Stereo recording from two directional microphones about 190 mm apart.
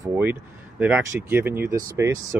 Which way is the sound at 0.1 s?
10° right (ahead or behind).